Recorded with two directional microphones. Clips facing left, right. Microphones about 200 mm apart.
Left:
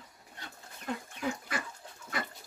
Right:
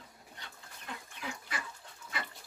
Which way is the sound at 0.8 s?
40° left (ahead or behind).